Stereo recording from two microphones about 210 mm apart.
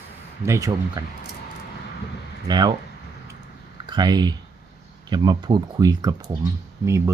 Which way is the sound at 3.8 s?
20° right (ahead or behind).